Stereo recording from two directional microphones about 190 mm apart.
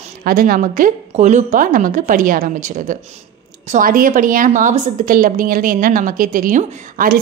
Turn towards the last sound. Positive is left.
turn(degrees=-45)  # may be behind; listen again after turning